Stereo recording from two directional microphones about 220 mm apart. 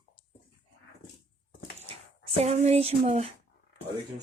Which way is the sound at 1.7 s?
30° right (ahead or behind).